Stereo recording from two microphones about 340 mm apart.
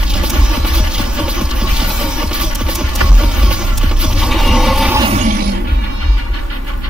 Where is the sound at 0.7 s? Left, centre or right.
Centre.